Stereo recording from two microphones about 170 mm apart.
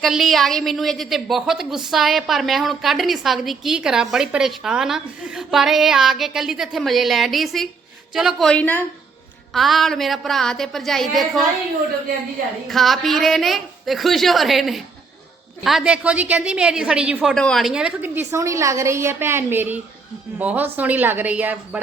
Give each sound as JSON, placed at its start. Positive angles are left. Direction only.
{"t": 0.0, "sound": "a woman's voice", "side_deg": 0}
{"t": 12.6, "sound": "a woman's voice", "side_deg": 0}